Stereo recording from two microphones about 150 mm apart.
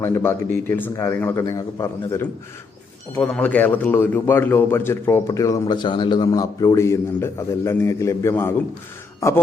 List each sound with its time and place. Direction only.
0.0 s a man's voice: 15° left (ahead or behind)
3.2 s a man's voice: 10° left (ahead or behind)